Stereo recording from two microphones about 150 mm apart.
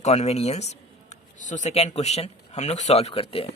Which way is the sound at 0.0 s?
45° left (ahead or behind).